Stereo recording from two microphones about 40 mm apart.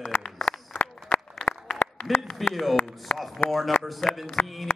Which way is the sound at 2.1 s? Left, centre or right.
Centre.